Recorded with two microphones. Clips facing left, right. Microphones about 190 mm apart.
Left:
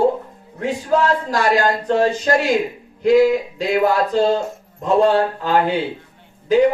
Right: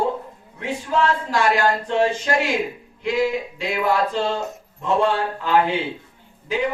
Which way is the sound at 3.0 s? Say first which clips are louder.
Left 9 dB; 40° left (ahead or behind).